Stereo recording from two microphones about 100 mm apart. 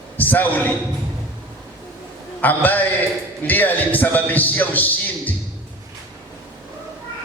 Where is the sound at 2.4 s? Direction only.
15° left (ahead or behind).